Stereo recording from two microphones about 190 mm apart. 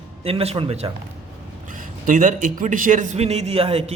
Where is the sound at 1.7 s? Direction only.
45° right (ahead or behind).